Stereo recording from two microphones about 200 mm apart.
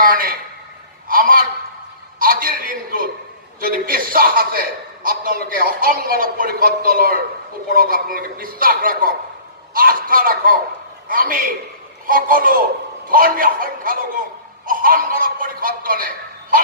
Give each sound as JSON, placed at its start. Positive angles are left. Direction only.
{"t": 0.0, "sound": "a man's voice", "side_deg": -45}
{"t": 1.0, "sound": "a sound", "side_deg": -45}
{"t": 3.6, "sound": "a man's voice", "side_deg": -45}